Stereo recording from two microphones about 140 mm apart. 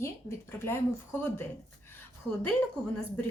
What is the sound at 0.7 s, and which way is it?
Speech, 15° left (ahead or behind).